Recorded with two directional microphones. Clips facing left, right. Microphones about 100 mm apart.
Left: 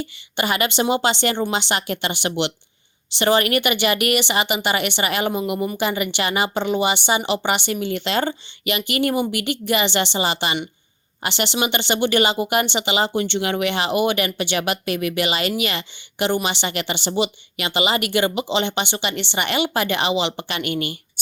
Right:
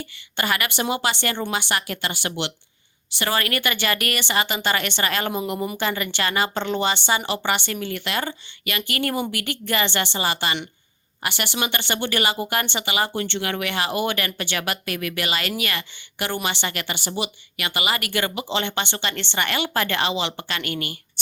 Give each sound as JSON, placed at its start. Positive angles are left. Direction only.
{"t": 0.0, "sound": "a woman's voice", "side_deg": 20}
{"t": 5.7, "sound": "a woman's voice", "side_deg": 15}